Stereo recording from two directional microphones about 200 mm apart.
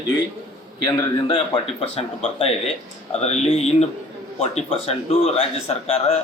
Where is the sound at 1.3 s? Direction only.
25° left (ahead or behind).